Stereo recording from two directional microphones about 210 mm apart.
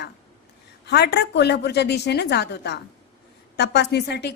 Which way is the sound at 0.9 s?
50° left (ahead or behind).